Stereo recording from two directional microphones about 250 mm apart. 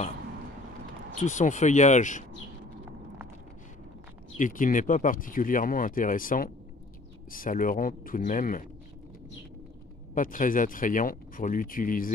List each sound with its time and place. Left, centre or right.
1.1 s speech: left
4.4 s speech: left
10.1 s speech: left